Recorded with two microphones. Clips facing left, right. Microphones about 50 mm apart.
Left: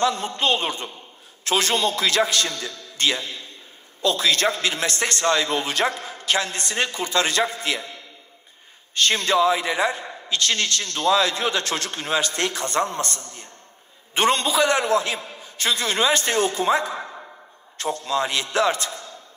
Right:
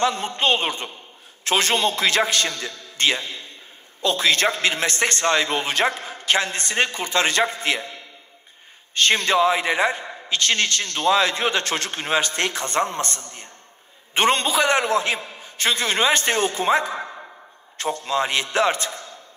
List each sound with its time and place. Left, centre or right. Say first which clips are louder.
0.0 s a man's voice: right 1 dB; right
8.9 s a man's voice: right 1 dB; right